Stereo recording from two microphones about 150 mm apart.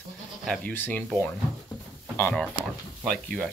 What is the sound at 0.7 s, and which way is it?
Speech, 10° left (ahead or behind).